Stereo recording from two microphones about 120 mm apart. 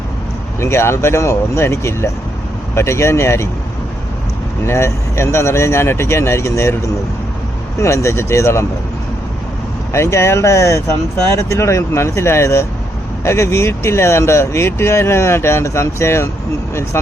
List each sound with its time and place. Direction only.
0.6 s speech: 20° left (ahead or behind)
4.6 s speech: 20° left (ahead or behind)
9.9 s speech: 25° left (ahead or behind)